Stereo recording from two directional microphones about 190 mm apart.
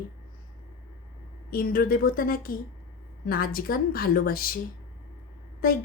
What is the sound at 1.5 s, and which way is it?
Speech, 50° left (ahead or behind).